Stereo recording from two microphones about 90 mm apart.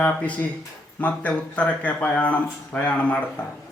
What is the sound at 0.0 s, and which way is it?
Speech, 15° left (ahead or behind).